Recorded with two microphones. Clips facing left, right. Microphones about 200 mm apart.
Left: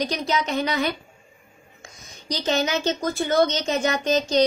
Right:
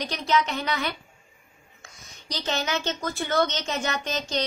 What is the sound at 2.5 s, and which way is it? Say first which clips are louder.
Speech: left 5 dB; 15° left (ahead or behind).